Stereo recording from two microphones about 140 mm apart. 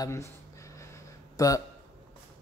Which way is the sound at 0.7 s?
20° left (ahead or behind).